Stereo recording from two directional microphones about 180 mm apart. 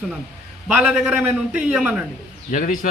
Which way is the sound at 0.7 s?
5° right (ahead or behind).